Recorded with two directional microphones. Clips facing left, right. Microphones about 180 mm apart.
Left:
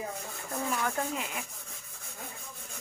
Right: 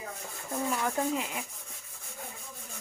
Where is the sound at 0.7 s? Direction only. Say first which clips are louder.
Right 3 dB; 10° right (ahead or behind).